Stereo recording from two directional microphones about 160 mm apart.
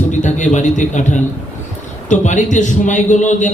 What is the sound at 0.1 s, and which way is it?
A man's voice, 50° left (ahead or behind).